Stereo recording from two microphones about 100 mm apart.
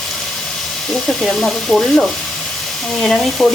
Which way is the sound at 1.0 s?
Centre (ahead or behind).